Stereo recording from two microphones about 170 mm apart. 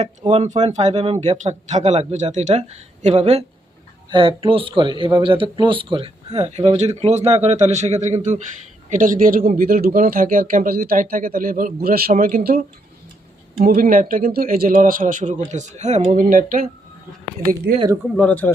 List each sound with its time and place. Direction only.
0.0 s a man's voice: 40° right (ahead or behind); by 16.6 s 55° right (ahead or behind)
18.2 s speech: 10° left (ahead or behind)